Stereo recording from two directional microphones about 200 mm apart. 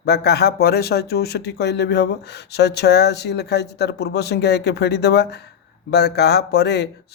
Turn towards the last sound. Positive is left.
turn(degrees=55)  # may be behind; listen again after turning